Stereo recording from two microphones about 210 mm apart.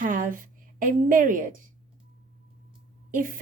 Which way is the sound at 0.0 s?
40° right (ahead or behind).